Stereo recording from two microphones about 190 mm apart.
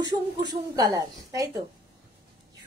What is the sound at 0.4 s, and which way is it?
A woman's voice, 20° right (ahead or behind).